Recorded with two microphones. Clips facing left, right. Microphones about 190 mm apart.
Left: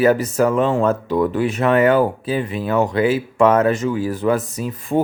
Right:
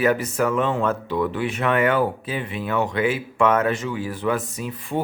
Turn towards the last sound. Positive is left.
turn(degrees=45)  # may be behind; listen again after turning